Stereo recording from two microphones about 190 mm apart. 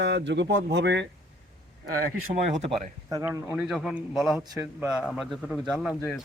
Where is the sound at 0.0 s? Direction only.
65° right (ahead or behind).